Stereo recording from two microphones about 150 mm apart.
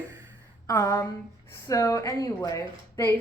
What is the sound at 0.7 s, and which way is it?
A woman's voice, 25° left (ahead or behind).